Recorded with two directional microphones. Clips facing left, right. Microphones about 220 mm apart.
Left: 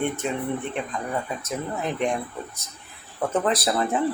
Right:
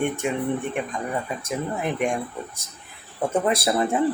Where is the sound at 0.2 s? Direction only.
10° right (ahead or behind).